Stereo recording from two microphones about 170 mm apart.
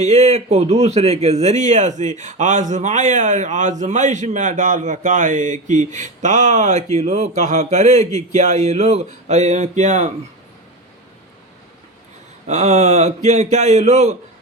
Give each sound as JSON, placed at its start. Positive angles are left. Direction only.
{"t": 0.0, "sound": "speech", "side_deg": -40}
{"t": 12.5, "sound": "speech", "side_deg": -40}